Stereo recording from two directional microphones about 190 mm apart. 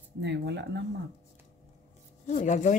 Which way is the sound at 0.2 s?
65° right (ahead or behind).